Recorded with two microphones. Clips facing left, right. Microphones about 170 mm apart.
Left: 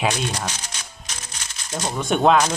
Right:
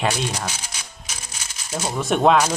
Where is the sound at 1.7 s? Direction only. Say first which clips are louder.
Even; 5° right (ahead or behind).